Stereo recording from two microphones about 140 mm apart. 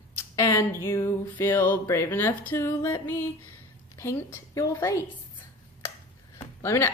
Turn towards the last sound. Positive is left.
turn(degrees=15)  # may be behind; listen again after turning